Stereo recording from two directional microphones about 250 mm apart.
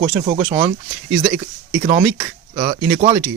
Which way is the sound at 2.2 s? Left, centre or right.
Centre.